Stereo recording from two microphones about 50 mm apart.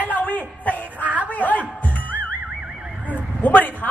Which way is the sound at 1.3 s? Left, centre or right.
Left.